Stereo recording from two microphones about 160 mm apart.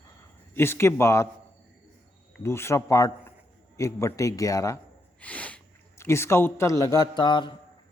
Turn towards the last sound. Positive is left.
turn(degrees=30)  # may be behind; listen again after turning